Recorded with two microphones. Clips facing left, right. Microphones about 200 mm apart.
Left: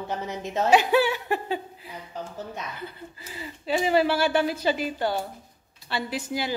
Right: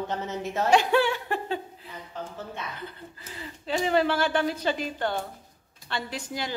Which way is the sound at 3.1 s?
10° left (ahead or behind).